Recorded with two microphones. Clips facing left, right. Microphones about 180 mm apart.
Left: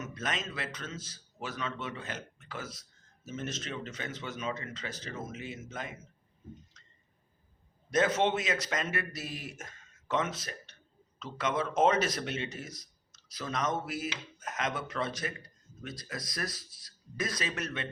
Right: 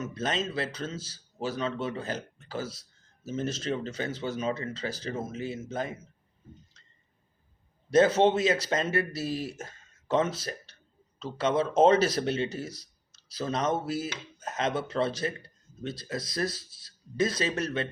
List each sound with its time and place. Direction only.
0.0 s speech: 30° right (ahead or behind)
6.8 s a sound: 30° right (ahead or behind)
7.9 s speech: 30° right (ahead or behind)